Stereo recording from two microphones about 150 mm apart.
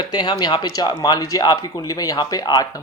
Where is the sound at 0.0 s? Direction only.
30° left (ahead or behind).